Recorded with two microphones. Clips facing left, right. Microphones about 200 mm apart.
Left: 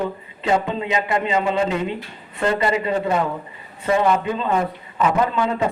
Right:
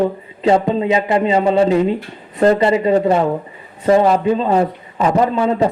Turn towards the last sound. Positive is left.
turn(degrees=-35)  # may be behind; listen again after turning